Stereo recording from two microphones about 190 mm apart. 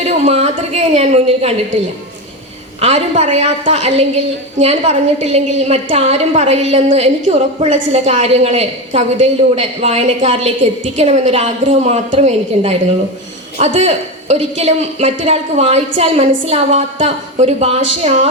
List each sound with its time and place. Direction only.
0.0 s a woman's voice: 35° right (ahead or behind)
2.8 s a woman's voice: 35° right (ahead or behind)